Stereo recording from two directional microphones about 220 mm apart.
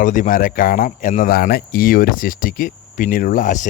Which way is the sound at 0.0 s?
35° left (ahead or behind).